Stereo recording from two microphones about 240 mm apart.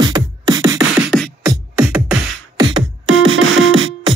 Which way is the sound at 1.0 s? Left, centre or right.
Centre.